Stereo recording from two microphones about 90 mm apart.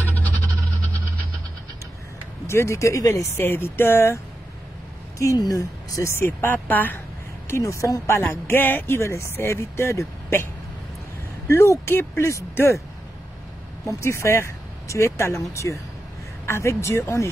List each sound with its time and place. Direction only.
0.0 s a sound: 20° left (ahead or behind)
2.4 s speech: 30° left (ahead or behind)
5.4 s speech: 40° left (ahead or behind); by 7.0 s 20° left (ahead or behind)
7.4 s speech: 35° left (ahead or behind)
13.8 s speech: 30° left (ahead or behind)